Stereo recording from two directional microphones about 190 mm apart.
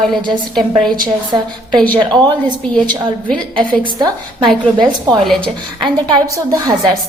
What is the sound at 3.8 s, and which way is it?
Speech, 25° right (ahead or behind).